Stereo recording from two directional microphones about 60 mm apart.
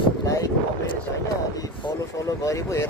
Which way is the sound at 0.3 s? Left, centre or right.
Left.